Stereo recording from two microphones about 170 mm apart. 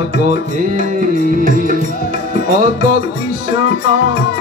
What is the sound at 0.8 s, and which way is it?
Music, 50° right (ahead or behind).